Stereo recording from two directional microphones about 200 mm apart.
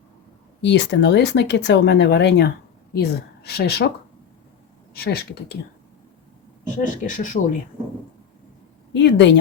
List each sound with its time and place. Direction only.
0.6 s speech: 60° left (ahead or behind)
4.9 s speech: 50° left (ahead or behind)
6.7 s speech: 40° left (ahead or behind)
8.9 s speech: 60° left (ahead or behind)